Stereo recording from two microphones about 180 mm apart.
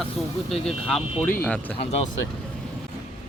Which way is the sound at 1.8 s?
35° left (ahead or behind).